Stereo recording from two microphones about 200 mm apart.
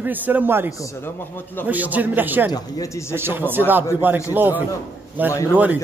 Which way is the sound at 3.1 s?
10° right (ahead or behind).